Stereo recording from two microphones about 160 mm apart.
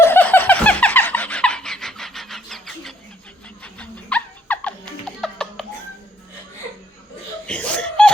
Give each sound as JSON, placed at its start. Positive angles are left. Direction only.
{"t": 0.0, "sound": "a sound", "side_deg": 10}
{"t": 3.6, "sound": "music", "side_deg": 10}
{"t": 7.4, "sound": "chuckle", "side_deg": 10}